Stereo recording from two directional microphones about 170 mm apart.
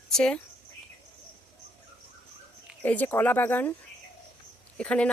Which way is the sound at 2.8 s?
10° left (ahead or behind).